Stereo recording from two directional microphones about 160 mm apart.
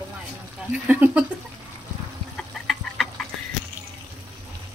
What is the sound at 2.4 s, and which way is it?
Duck, centre (ahead or behind).